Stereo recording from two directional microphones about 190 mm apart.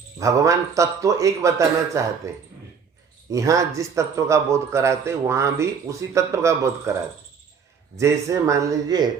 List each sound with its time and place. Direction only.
0.2 s a man's voice: 15° right (ahead or behind)
3.3 s a man's voice: 15° right (ahead or behind)
7.9 s a man's voice: 15° right (ahead or behind)